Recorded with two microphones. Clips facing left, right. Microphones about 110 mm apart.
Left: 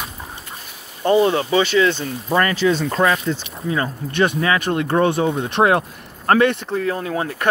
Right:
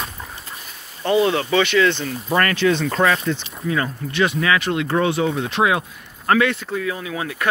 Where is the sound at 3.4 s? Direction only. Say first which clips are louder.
Even; 25° left (ahead or behind).